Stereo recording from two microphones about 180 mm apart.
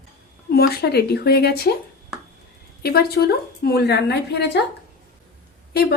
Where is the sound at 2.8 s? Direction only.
60° left (ahead or behind).